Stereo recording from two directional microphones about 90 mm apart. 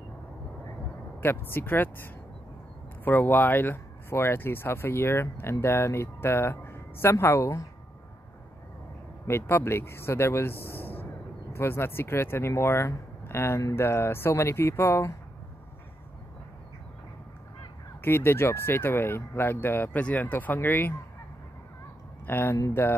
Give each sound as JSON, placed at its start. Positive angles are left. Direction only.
{"t": 1.2, "sound": "speech", "side_deg": 25}
{"t": 9.3, "sound": "speech", "side_deg": 30}
{"t": 18.0, "sound": "speech", "side_deg": 25}
{"t": 22.2, "sound": "speech", "side_deg": 25}